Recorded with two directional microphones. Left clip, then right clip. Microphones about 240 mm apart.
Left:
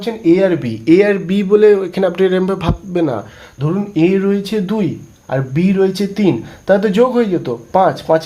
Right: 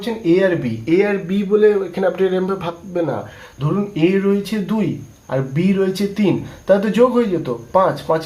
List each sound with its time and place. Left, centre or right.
0.0 s a man's voice: left